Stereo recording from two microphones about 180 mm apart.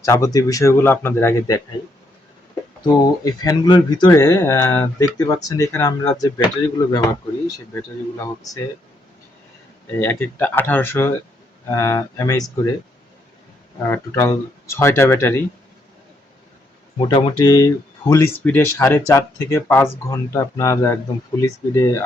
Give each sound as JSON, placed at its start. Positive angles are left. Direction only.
{"t": 0.0, "sound": "speech", "side_deg": 15}
{"t": 2.8, "sound": "speech", "side_deg": 20}
{"t": 10.0, "sound": "speech", "side_deg": 10}
{"t": 13.8, "sound": "speech", "side_deg": 15}
{"t": 17.0, "sound": "speech", "side_deg": 25}